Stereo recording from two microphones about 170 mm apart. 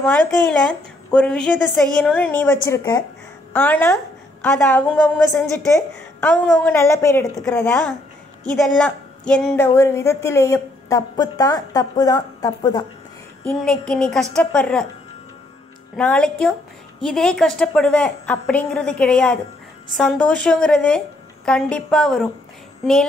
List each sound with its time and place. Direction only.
1.1 s a woman's voice: 5° left (ahead or behind)
2.8 s speech: 25° left (ahead or behind)
3.5 s a woman's voice: 10° left (ahead or behind)
9.6 s speech: 15° left (ahead or behind)
13.4 s a woman's voice: 5° left (ahead or behind)
16.0 s a woman's voice: 5° left (ahead or behind)